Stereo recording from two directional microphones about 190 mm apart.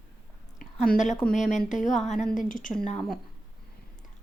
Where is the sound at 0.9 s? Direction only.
40° left (ahead or behind).